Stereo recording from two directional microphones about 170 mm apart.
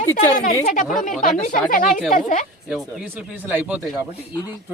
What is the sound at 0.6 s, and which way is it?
A woman's voice, 50° left (ahead or behind).